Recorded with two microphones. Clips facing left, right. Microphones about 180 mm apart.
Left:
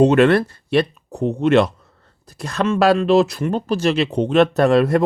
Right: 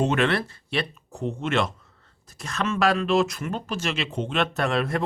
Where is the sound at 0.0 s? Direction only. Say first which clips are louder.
Left 10 dB; 40° left (ahead or behind).